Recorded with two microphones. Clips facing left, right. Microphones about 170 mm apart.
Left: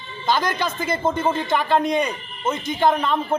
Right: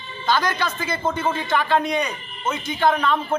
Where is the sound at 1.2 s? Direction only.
15° left (ahead or behind).